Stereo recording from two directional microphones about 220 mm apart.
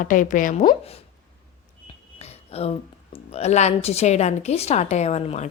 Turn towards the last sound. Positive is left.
turn(degrees=30)  # may be behind; listen again after turning